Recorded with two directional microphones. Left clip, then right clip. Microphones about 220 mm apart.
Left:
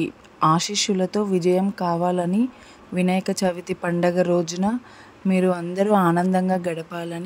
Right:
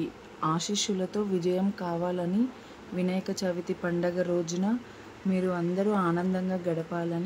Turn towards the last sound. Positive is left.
turn(degrees=40)  # may be behind; listen again after turning